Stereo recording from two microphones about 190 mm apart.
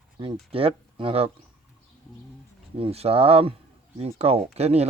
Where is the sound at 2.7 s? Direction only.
30° right (ahead or behind).